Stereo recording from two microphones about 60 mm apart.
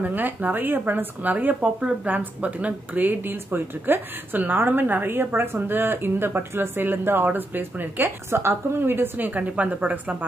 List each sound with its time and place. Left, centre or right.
0.0 s speech: right